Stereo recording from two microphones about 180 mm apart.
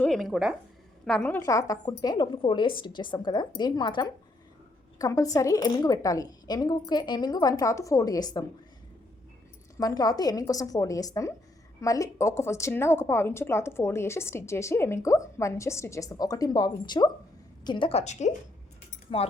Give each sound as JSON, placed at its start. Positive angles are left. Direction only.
{"t": 0.0, "sound": "a woman's voice", "side_deg": 0}
{"t": 1.4, "sound": "speech", "side_deg": 15}
{"t": 9.7, "sound": "a woman's voice", "side_deg": 20}